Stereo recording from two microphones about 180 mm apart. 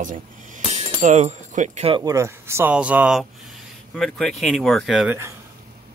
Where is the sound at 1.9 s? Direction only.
20° right (ahead or behind).